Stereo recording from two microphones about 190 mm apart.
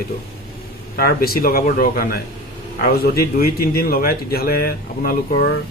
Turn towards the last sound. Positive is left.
turn(degrees=50)  # may be behind; listen again after turning